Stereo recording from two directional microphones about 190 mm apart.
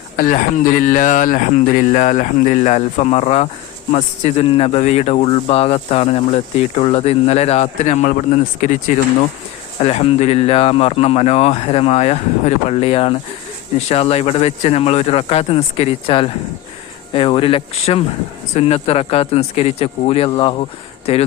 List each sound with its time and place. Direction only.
0.2 s speech: 45° left (ahead or behind)